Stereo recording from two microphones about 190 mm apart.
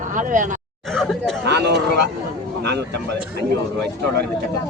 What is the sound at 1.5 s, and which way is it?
A man's voice, 65° right (ahead or behind).